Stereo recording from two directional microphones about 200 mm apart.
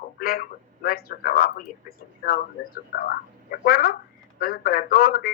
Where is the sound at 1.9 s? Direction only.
50° left (ahead or behind).